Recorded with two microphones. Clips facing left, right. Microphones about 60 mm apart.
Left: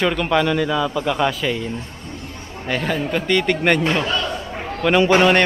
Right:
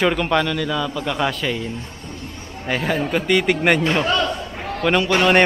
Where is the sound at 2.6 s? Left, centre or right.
Centre.